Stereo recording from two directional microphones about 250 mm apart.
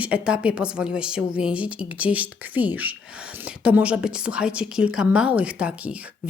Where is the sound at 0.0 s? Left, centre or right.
Centre.